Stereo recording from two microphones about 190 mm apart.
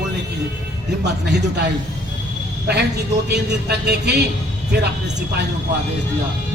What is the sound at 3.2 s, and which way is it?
A man's voice, 60° right (ahead or behind).